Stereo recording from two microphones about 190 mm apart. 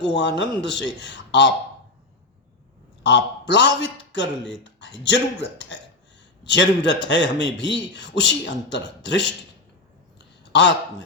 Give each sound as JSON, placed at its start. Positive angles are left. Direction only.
{"t": 0.1, "sound": "a man's voice", "side_deg": 65}
{"t": 3.0, "sound": "a man's voice", "side_deg": 65}
{"t": 10.2, "sound": "a sound", "side_deg": 65}